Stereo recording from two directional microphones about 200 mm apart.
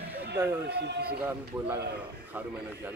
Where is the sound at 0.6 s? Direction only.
55° right (ahead or behind).